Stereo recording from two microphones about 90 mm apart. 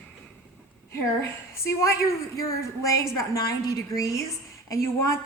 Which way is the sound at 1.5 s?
30° left (ahead or behind).